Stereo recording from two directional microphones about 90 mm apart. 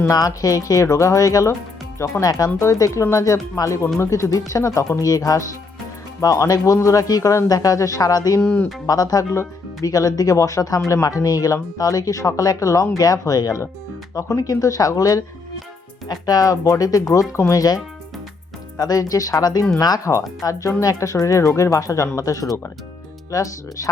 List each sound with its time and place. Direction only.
0.1 s speech: 40° left (ahead or behind)
8.4 s speech: 20° left (ahead or behind)
8.9 s speech: 45° left (ahead or behind)
18.8 s speech: 40° left (ahead or behind)